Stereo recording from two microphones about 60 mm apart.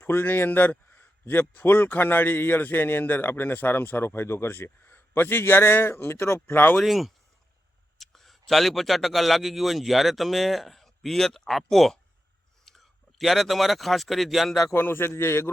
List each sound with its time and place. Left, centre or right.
0.0 s a man's voice: left
6.8 s speech: centre
14.7 s a man's voice: left